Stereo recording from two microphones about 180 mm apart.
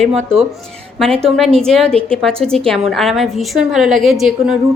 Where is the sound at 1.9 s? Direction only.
30° right (ahead or behind).